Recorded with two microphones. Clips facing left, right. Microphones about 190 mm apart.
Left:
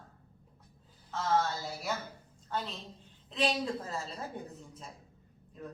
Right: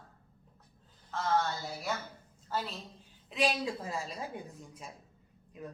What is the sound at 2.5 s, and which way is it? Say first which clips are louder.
A woman's voice: right 1 dB; 5° right (ahead or behind).